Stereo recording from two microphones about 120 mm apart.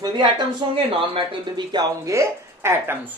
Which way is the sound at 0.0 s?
35° right (ahead or behind).